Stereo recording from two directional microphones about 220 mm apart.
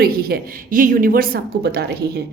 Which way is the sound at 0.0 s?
45° right (ahead or behind).